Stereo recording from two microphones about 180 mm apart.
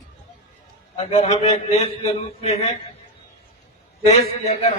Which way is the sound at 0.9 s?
35° left (ahead or behind).